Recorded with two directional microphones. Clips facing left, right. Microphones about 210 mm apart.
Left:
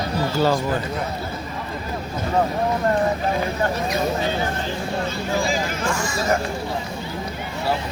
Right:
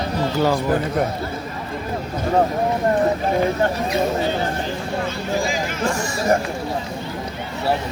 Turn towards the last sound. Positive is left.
turn(degrees=-35)  # may be behind; listen again after turning